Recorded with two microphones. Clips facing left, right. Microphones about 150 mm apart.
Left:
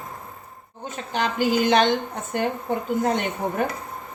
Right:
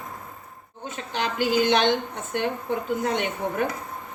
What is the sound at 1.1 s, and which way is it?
Speech, 45° left (ahead or behind).